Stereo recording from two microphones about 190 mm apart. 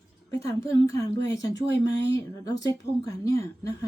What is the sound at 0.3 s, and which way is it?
A woman's voice, 15° left (ahead or behind).